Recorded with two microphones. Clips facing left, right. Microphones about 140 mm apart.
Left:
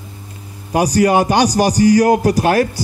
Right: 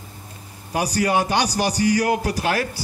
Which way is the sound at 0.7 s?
45° left (ahead or behind).